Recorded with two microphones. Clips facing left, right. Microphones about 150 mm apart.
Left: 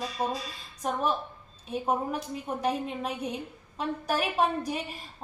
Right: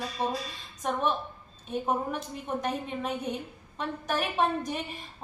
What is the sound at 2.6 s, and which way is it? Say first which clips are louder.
A woman's voice: left 3 dB; 5° left (ahead or behind).